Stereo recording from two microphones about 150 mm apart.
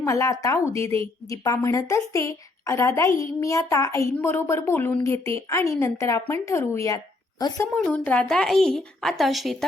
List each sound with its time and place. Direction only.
0.0 s a woman's voice: 20° left (ahead or behind)
7.8 s a woman's voice: 10° left (ahead or behind)